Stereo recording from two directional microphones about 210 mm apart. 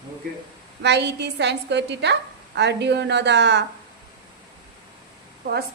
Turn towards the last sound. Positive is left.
turn(degrees=-50)  # may be behind; listen again after turning